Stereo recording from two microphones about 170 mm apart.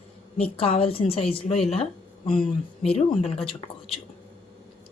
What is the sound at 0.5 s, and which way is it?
A woman's voice, 35° left (ahead or behind).